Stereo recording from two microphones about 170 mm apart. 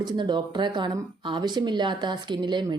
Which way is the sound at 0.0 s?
25° right (ahead or behind).